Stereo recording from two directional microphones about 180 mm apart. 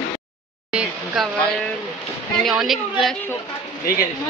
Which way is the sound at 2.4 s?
Centre (ahead or behind).